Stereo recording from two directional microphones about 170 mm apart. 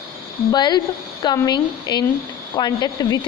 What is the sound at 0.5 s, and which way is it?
A woman's voice, 25° left (ahead or behind).